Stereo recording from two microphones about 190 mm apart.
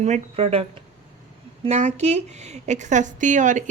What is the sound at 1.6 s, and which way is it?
A woman's voice, 35° right (ahead or behind).